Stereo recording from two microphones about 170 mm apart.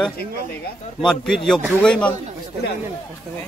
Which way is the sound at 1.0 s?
Centre (ahead or behind).